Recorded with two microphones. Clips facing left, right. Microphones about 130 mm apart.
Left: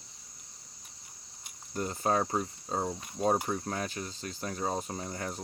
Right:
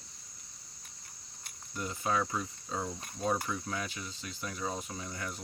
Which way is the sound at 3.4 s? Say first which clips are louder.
Left 3 dB; 45° left (ahead or behind).